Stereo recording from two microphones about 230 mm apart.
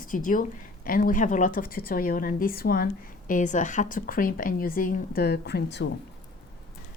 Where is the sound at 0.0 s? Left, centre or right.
Left.